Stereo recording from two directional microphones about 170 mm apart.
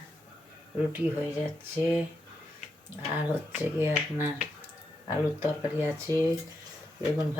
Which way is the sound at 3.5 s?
10° right (ahead or behind).